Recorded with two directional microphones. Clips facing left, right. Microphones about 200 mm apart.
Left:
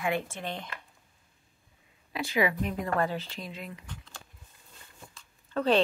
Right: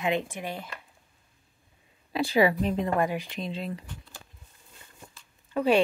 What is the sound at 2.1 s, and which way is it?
Speech, 35° right (ahead or behind).